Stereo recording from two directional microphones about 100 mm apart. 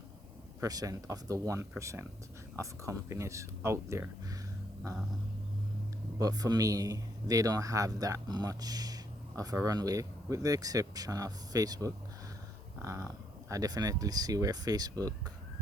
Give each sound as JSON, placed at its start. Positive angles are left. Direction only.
{"t": 0.6, "sound": "a man's voice", "side_deg": -35}
{"t": 6.1, "sound": "a man's voice", "side_deg": -40}